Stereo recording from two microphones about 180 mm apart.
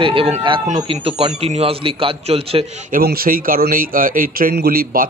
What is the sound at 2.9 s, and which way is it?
A man's voice, 55° right (ahead or behind).